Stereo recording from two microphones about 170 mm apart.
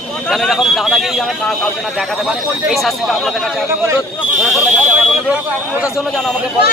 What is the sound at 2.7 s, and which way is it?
Speech, centre (ahead or behind).